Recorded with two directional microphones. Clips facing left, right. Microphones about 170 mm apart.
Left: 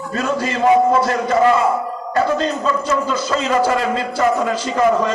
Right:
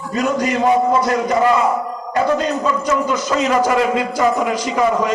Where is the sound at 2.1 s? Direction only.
15° right (ahead or behind).